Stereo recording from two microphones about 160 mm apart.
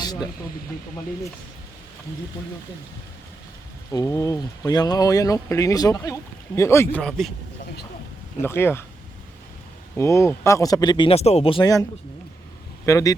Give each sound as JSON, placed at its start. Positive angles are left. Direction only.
{"t": 0.0, "sound": "snake", "side_deg": 25}
{"t": 3.9, "sound": "speech", "side_deg": 20}
{"t": 7.0, "sound": "a man's voice", "side_deg": 0}
{"t": 8.4, "sound": "speech", "side_deg": 15}
{"t": 10.0, "sound": "speech", "side_deg": 20}
{"t": 12.8, "sound": "speech", "side_deg": 20}